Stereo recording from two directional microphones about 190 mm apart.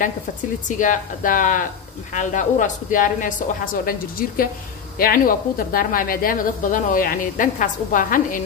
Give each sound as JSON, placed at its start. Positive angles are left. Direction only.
{"t": 0.7, "sound": "a woman's voice", "side_deg": 45}